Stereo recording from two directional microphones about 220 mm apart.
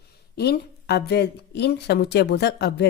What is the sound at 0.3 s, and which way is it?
Speech, 50° left (ahead or behind).